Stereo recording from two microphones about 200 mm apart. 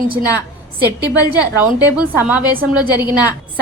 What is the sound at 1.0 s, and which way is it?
Speech, 20° left (ahead or behind).